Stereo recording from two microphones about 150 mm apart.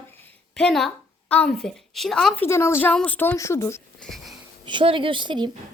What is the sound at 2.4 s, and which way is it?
A woman's voice, 15° left (ahead or behind).